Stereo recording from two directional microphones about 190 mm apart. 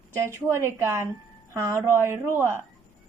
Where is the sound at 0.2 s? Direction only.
15° right (ahead or behind).